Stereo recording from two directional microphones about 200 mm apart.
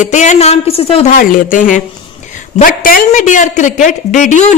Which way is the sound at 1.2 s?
45° left (ahead or behind).